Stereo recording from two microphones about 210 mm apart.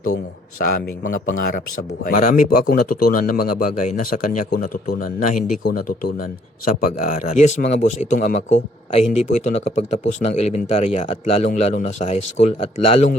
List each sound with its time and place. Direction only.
0.9 s a man's voice: 40° left (ahead or behind)